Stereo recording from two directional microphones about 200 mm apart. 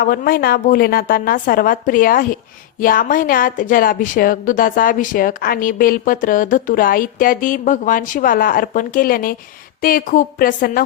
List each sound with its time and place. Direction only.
0.0 s a woman's voice: 45° left (ahead or behind)